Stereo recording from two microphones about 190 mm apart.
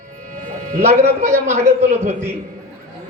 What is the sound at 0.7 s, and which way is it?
Speech, 35° right (ahead or behind).